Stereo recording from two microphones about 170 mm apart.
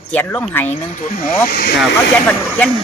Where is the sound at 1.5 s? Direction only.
60° left (ahead or behind).